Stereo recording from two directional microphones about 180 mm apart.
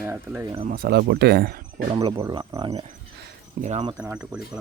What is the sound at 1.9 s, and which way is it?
Speech, 20° right (ahead or behind).